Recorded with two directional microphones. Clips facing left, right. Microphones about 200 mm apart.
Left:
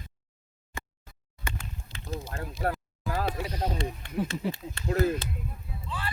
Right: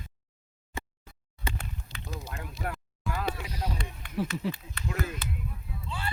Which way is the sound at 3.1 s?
35° left (ahead or behind).